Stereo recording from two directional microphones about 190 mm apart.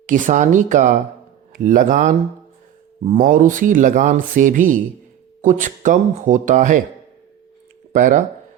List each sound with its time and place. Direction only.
0.0 s speech: 45° right (ahead or behind)
7.9 s speech: 40° right (ahead or behind)